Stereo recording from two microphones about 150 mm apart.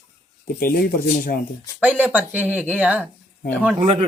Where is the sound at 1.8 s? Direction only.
10° right (ahead or behind).